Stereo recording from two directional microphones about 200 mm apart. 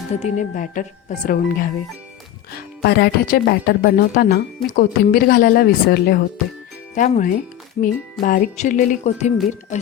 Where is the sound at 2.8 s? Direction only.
55° left (ahead or behind).